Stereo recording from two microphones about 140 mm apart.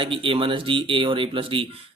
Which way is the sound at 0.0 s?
40° right (ahead or behind).